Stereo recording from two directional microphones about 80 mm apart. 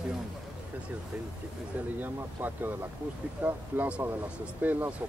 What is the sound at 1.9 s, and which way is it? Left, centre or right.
Speech, right.